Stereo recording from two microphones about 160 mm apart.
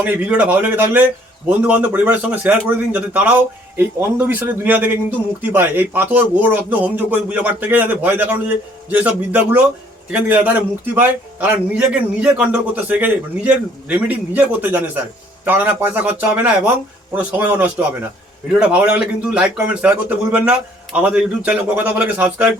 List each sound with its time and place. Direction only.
0.0 s a man's voice: 10° right (ahead or behind)